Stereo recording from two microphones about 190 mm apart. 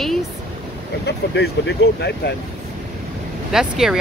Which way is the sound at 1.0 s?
65° left (ahead or behind).